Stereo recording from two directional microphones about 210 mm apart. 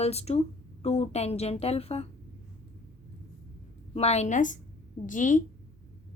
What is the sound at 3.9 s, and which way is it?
A woman's voice, 30° left (ahead or behind).